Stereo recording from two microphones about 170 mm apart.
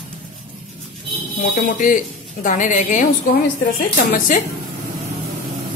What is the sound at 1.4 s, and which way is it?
A woman's voice, 50° left (ahead or behind).